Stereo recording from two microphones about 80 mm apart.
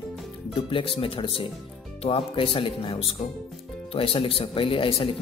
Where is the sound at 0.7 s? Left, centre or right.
Left.